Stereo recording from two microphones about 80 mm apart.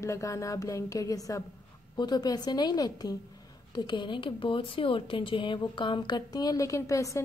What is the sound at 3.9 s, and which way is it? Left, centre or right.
A woman's voice, left.